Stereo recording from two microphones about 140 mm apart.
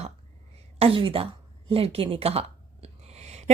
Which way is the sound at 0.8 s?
40° right (ahead or behind).